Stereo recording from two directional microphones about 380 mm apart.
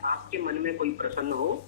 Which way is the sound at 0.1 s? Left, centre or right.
Right.